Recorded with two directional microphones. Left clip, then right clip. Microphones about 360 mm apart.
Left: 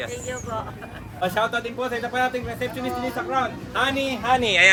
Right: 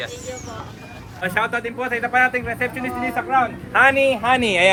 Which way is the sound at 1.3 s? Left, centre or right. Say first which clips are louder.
Right 3 dB; centre.